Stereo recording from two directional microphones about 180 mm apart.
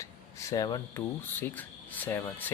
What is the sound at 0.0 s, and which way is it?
Speech, 20° left (ahead or behind).